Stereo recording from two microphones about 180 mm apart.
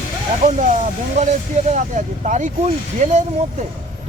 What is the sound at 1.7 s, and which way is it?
Speech, 45° right (ahead or behind).